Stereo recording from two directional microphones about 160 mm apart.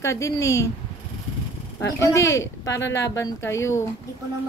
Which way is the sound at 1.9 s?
20° left (ahead or behind).